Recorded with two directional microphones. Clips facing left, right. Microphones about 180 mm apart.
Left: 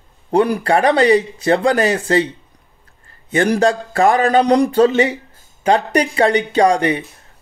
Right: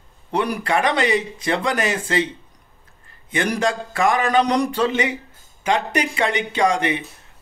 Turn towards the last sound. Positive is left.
turn(degrees=35)  # may be behind; listen again after turning